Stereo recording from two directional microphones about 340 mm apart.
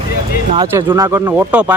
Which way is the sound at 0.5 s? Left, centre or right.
Centre.